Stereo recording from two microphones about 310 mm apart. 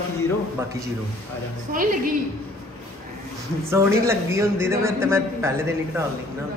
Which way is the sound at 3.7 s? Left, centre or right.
Centre.